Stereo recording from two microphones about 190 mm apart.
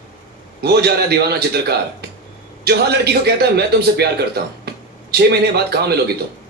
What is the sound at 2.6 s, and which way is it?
A man's voice, 60° right (ahead or behind).